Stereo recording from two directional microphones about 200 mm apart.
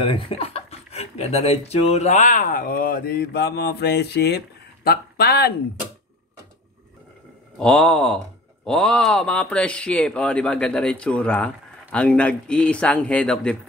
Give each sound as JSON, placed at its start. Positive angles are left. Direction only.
{"t": 0.0, "sound": "speech", "side_deg": 25}
{"t": 7.5, "sound": "speech", "side_deg": 5}